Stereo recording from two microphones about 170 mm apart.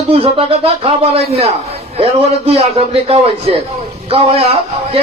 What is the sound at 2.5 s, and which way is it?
Speech, 35° right (ahead or behind).